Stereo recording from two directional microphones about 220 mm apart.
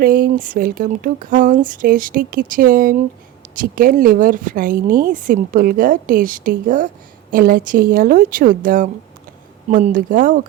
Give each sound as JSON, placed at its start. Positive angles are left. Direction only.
{"t": 0.0, "sound": "speech", "side_deg": -40}